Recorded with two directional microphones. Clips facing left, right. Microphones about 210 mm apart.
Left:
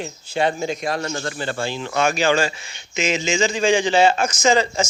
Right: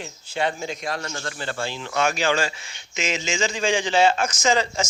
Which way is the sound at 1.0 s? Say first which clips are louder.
Left 6 dB; 20° left (ahead or behind).